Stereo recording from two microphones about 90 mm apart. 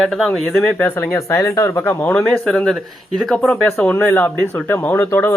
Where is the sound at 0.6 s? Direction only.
15° left (ahead or behind).